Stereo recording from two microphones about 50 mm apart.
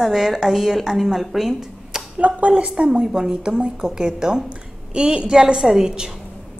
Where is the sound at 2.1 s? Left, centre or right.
Right.